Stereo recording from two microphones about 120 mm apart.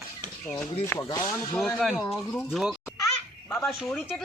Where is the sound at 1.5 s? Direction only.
Centre (ahead or behind).